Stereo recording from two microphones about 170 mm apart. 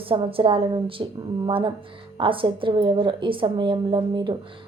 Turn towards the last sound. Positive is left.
turn(degrees=-25)  # may be behind; listen again after turning